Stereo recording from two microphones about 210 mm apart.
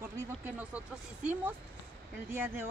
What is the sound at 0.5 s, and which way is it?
Speech, 5° right (ahead or behind).